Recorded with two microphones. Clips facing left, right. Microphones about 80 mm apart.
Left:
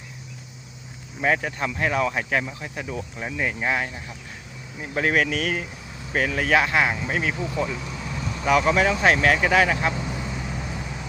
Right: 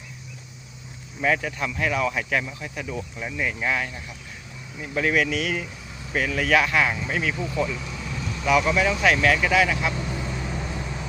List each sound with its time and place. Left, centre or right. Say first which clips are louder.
1.2 s speech: left 1 dB; left
4.8 s speech: left 1 dB; left
8.4 s speech: left 1 dB; left
9.9 s vehicle: even; centre